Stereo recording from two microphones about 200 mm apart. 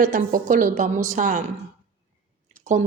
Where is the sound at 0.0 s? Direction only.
40° right (ahead or behind).